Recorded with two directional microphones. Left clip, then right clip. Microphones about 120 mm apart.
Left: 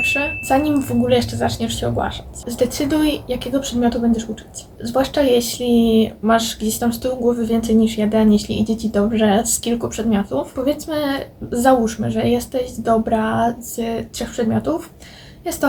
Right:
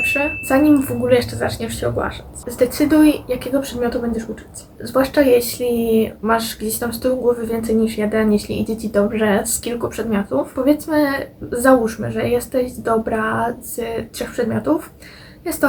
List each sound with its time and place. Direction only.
0.0 s speech: 5° left (ahead or behind)